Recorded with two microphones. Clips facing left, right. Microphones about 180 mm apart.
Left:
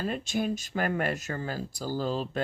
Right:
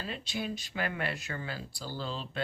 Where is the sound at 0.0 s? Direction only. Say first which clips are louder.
Left 7 dB; 50° left (ahead or behind).